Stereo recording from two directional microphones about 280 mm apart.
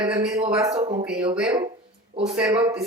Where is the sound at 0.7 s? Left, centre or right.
Right.